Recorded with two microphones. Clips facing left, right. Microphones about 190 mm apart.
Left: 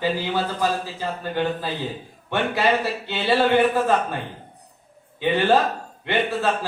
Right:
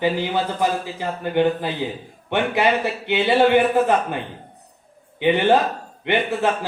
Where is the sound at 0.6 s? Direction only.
20° right (ahead or behind).